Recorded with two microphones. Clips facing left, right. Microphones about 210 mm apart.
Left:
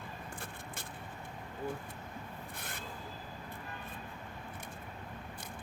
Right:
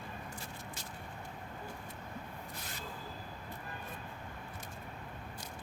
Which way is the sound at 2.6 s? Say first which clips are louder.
Left 1 dB; 55° left (ahead or behind).